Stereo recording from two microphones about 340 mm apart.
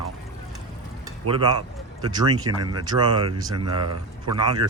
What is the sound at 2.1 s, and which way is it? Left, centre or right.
Speech, centre.